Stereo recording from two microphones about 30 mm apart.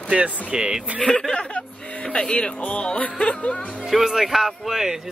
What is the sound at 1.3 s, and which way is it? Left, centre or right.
Music, left.